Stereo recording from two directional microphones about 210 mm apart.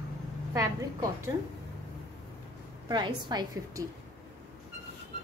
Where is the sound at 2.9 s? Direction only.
20° right (ahead or behind).